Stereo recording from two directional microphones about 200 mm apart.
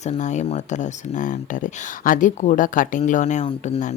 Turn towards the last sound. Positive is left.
turn(degrees=35)  # may be behind; listen again after turning